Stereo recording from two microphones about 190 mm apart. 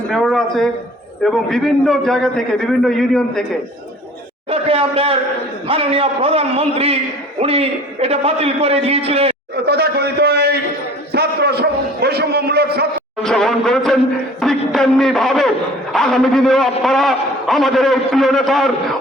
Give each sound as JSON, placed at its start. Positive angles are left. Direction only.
{"t": 0.1, "sound": "a man's voice", "side_deg": 0}
{"t": 4.4, "sound": "a man's voice", "side_deg": -30}
{"t": 9.6, "sound": "a man's voice", "side_deg": -55}
{"t": 13.2, "sound": "a man's voice", "side_deg": 5}